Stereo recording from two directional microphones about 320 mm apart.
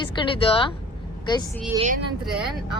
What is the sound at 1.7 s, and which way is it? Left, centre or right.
Speech, right.